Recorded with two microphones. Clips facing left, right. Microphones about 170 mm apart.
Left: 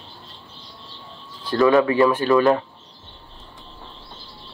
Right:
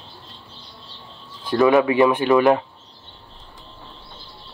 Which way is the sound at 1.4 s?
15° right (ahead or behind).